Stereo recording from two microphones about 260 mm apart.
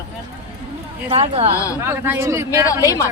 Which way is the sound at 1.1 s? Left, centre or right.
Right.